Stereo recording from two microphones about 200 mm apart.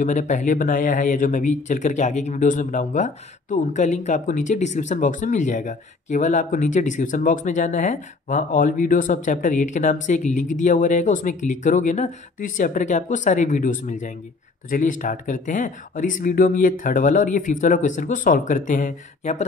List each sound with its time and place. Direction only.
0.0 s speech: 40° left (ahead or behind)